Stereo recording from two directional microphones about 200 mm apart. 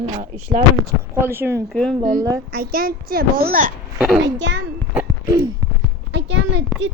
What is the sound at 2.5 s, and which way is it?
A woman's voice, 45° right (ahead or behind).